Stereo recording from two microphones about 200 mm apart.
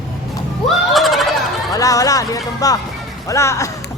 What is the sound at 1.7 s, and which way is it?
Music, 15° left (ahead or behind).